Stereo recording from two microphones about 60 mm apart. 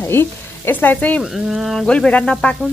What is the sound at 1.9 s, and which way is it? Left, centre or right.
Frying, left.